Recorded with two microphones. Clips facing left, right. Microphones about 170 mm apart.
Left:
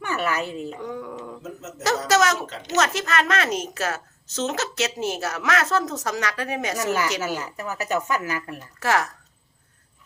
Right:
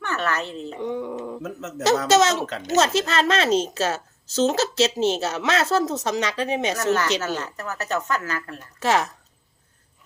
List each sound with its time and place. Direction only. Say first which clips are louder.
0.0 s a woman's voice: even; 10° left (ahead or behind)
0.8 s a sound: right 5 dB; 25° right (ahead or behind)
1.4 s speech: right 4 dB; 65° right (ahead or behind)
2.0 s a woman's voice: even; 25° right (ahead or behind)
6.7 s a woman's voice: even; 10° left (ahead or behind)
8.8 s a woman's voice: right 2 dB; 20° right (ahead or behind)